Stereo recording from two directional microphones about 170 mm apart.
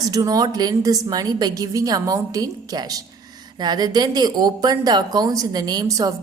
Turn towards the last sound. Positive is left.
turn(degrees=-20)  # may be behind; listen again after turning